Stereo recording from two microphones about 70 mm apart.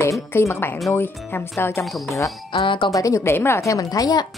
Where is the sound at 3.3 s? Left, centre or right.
Left.